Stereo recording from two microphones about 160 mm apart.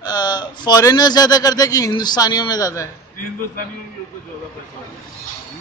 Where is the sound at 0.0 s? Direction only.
25° left (ahead or behind).